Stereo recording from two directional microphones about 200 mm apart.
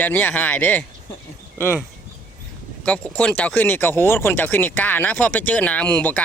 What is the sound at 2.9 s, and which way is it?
Speech, 5° left (ahead or behind).